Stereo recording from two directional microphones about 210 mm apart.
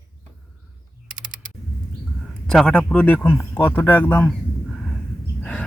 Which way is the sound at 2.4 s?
5° left (ahead or behind).